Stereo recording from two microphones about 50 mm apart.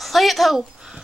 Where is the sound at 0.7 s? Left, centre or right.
Centre.